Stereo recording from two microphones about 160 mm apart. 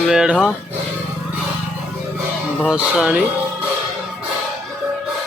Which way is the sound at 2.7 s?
5° right (ahead or behind).